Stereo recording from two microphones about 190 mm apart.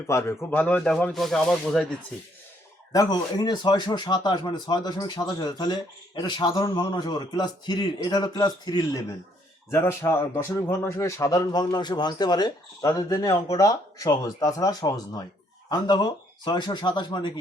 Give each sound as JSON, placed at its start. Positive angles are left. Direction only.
{"t": 0.1, "sound": "speech", "side_deg": 15}
{"t": 2.9, "sound": "speech", "side_deg": 20}